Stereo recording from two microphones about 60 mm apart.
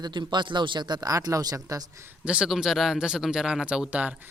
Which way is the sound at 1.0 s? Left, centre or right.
Right.